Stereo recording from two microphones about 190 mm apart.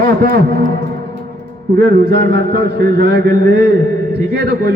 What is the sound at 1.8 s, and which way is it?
A man's voice, 55° right (ahead or behind).